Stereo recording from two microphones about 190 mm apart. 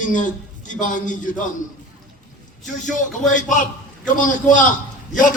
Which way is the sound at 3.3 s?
45° left (ahead or behind).